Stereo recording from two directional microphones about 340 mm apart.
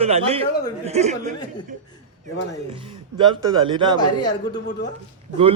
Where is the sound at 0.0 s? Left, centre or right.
Centre.